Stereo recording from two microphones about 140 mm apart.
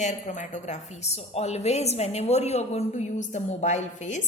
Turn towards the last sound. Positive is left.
turn(degrees=60)  # may be behind; listen again after turning